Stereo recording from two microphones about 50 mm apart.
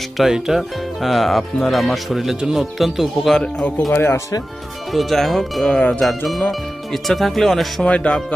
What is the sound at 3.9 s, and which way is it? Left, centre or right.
Speech, left.